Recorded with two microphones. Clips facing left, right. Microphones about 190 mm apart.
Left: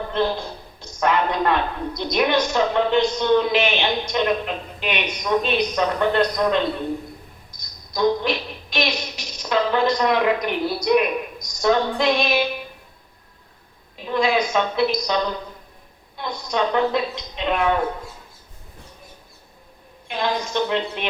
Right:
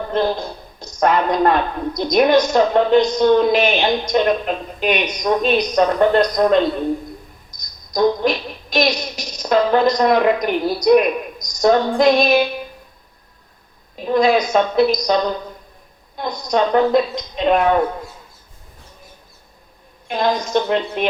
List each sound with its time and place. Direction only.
0.1 s a man's voice: 40° right (ahead or behind)
7.5 s music: 40° right (ahead or behind)
7.9 s a sound: 40° right (ahead or behind)
8.7 s a woman's voice: 40° right (ahead or behind)
13.9 s a man's voice: 40° right (ahead or behind)
20.1 s a woman's voice: 40° right (ahead or behind)